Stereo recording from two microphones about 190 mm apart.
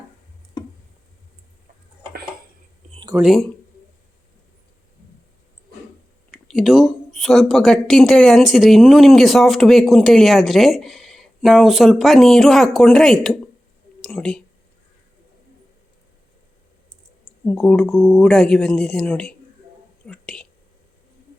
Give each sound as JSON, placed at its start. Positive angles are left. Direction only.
{"t": 2.9, "sound": "a sound", "side_deg": -25}
{"t": 3.2, "sound": "speech", "side_deg": 0}
{"t": 6.3, "sound": "speech", "side_deg": 0}
{"t": 17.4, "sound": "speech", "side_deg": 5}
{"t": 20.1, "sound": "whispering", "side_deg": 5}